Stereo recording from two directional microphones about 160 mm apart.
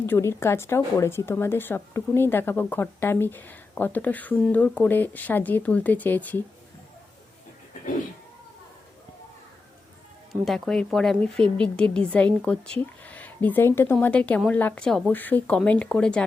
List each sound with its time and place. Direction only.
0.0 s a woman's voice: 15° left (ahead or behind)
10.4 s a woman's voice: centre (ahead or behind)